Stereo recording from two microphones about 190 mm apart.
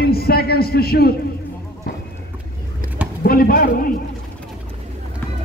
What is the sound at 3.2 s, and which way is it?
Speech, 50° left (ahead or behind).